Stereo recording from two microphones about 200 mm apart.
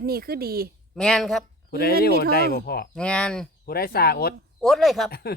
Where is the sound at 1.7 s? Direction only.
50° left (ahead or behind).